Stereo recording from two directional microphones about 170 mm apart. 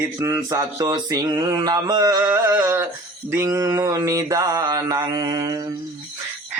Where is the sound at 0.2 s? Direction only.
20° right (ahead or behind).